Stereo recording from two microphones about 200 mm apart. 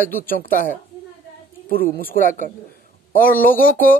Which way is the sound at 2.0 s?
45° left (ahead or behind).